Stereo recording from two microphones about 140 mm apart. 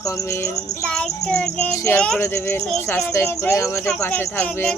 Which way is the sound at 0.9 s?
5° left (ahead or behind).